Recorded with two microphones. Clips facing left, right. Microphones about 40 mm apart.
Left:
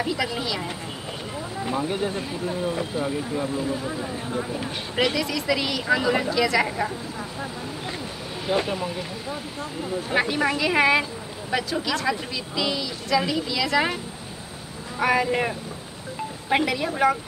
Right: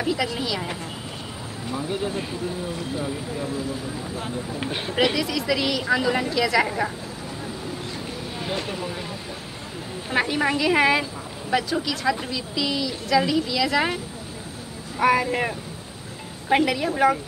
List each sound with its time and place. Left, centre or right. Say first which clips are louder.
0.0 s a woman's voice: right 1 dB; centre
1.8 s speech: right 1 dB; centre
4.9 s a woman's voice: right 1 dB; centre
8.6 s a woman's voice: left 2 dB; centre
10.0 s a woman's voice: right 1 dB; centre